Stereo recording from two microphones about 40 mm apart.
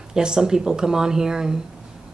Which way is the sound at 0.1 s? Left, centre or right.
Centre.